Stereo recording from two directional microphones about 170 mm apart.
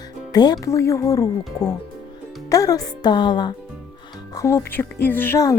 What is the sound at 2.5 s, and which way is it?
Speech, 20° left (ahead or behind).